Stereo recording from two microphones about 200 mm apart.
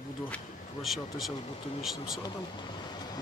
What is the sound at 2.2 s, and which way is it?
Speech, 20° left (ahead or behind).